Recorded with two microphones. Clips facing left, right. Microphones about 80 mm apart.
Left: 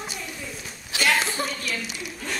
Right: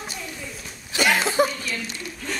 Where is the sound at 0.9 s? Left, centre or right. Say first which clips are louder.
Right 4 dB; right.